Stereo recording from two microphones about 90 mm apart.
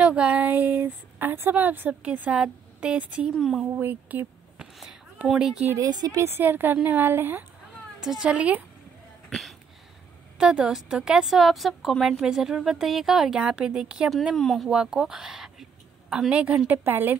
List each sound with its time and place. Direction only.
0.0 s a woman's voice: 15° right (ahead or behind)
3.3 s a woman's voice: centre (ahead or behind)
3.7 s speech: 20° right (ahead or behind)
5.3 s a woman's voice: 5° right (ahead or behind)
5.8 s speech: 45° right (ahead or behind)
6.2 s a woman's voice: 25° right (ahead or behind)
8.0 s a woman's voice: 5° right (ahead or behind)
9.3 s a sound: centre (ahead or behind)
10.3 s a woman's voice: 10° right (ahead or behind)
14.1 s a woman's voice: centre (ahead or behind)
14.7 s a woman's voice: 10° right (ahead or behind)